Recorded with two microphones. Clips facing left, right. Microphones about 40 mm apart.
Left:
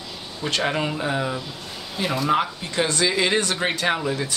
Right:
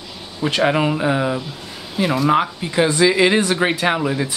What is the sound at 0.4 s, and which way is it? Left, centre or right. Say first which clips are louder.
Speech: right 6 dB; centre.